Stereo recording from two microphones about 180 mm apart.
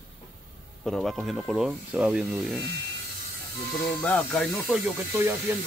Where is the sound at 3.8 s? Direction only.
10° left (ahead or behind).